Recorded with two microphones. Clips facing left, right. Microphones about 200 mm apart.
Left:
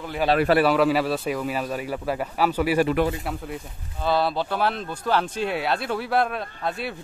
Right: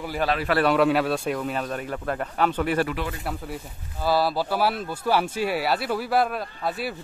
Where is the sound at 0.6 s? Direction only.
Centre (ahead or behind).